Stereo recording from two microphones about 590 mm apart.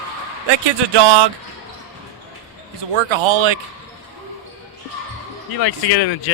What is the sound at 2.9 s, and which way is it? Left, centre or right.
Speech, right.